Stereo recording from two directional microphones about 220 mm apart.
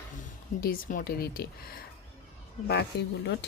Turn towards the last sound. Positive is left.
turn(degrees=50)  # may be behind; listen again after turning